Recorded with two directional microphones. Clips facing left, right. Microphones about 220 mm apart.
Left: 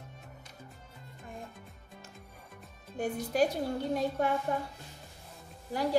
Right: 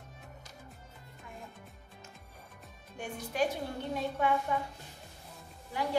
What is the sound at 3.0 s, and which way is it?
A woman's voice, 35° left (ahead or behind).